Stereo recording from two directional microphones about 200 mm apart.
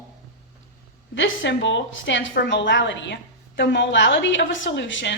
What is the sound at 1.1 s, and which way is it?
A woman's voice, 65° left (ahead or behind).